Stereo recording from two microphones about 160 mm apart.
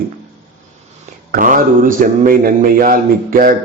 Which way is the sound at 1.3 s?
55° right (ahead or behind).